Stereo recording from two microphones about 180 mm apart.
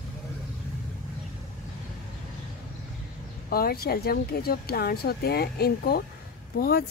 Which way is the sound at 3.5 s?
55° left (ahead or behind).